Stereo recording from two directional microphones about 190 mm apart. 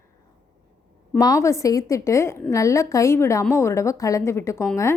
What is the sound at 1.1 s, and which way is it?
A woman's voice, 15° left (ahead or behind).